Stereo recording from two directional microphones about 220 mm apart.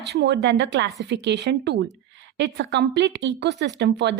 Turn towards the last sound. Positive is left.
turn(degrees=-50)  # may be behind; listen again after turning